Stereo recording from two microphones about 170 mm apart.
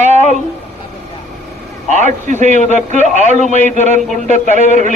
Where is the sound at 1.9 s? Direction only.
45° right (ahead or behind).